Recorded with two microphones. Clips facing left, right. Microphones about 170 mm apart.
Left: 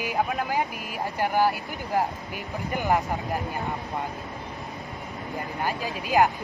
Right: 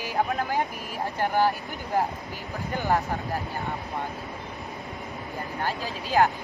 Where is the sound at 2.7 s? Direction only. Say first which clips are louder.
Left 1 dB; 15° left (ahead or behind).